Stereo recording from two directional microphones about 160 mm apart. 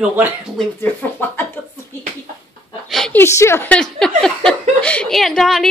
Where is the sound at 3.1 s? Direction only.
15° left (ahead or behind).